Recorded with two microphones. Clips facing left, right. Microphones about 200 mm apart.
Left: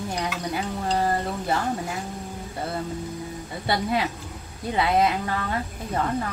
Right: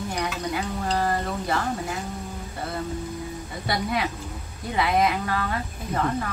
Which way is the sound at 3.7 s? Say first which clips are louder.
Left 2 dB; 30° left (ahead or behind).